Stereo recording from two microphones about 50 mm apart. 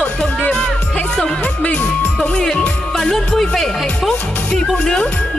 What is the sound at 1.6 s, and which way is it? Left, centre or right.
Music, left.